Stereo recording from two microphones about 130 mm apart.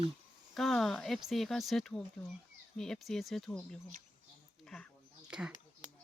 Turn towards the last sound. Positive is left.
turn(degrees=-5)  # may be behind; listen again after turning